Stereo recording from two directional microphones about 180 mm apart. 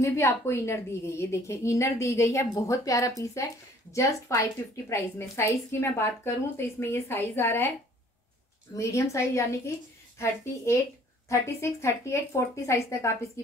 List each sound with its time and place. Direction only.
0.0 s a woman's voice: 15° left (ahead or behind)
8.7 s a woman's voice: 15° left (ahead or behind)